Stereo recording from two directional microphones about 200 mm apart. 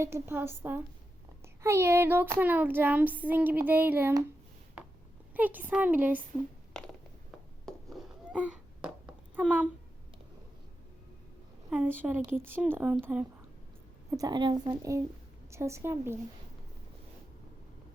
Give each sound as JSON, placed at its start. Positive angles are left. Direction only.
{"t": 0.0, "sound": "child singing", "side_deg": -10}
{"t": 5.3, "sound": "child singing", "side_deg": -10}
{"t": 6.7, "sound": "a sound", "side_deg": 5}
{"t": 11.7, "sound": "child singing", "side_deg": -10}
{"t": 14.2, "sound": "a woman's voice", "side_deg": -20}
{"t": 15.4, "sound": "child singing", "side_deg": -15}